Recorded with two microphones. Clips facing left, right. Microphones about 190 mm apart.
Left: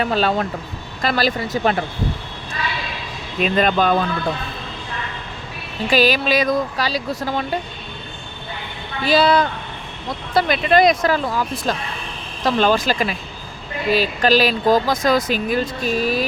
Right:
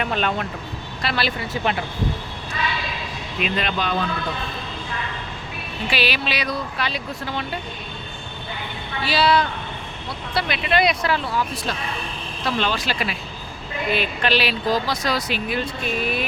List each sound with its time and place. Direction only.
0.0 s speech: 35° left (ahead or behind)
3.4 s speech: 45° left (ahead or behind)
5.9 s speech: 45° left (ahead or behind)
9.0 s speech: 45° left (ahead or behind)